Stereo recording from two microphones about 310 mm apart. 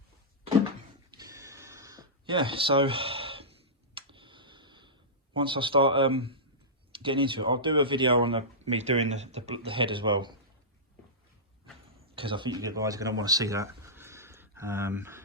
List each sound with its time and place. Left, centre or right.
1.1 s a sound: centre
6.9 s speech: centre
12.1 s speech: centre